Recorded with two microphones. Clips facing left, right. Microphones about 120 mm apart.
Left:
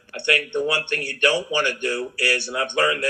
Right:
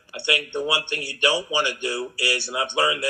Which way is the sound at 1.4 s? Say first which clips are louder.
Left 2 dB; 15° right (ahead or behind).